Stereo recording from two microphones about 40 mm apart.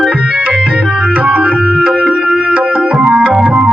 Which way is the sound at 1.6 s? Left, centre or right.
Right.